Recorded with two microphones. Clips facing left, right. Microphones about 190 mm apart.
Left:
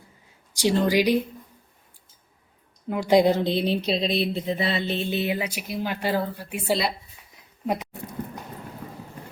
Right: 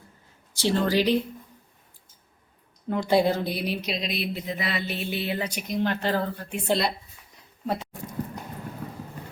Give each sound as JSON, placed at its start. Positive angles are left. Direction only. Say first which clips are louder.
{"t": 0.5, "sound": "speech", "louder": "left 2 dB", "side_deg": 15}
{"t": 2.9, "sound": "speech", "louder": "left 3 dB", "side_deg": 15}